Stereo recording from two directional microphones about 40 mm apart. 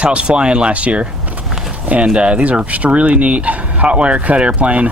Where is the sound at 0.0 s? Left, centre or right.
Right.